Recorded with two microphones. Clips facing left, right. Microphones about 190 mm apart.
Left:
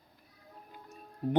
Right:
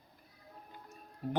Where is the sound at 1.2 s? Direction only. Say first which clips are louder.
Left 5 dB; 25° left (ahead or behind).